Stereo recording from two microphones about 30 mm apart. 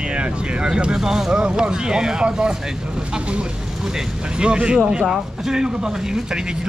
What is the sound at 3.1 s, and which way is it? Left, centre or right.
Speech, right.